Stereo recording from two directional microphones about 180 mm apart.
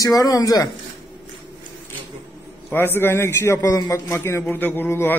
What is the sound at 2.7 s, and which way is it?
A man's voice, 10° left (ahead or behind).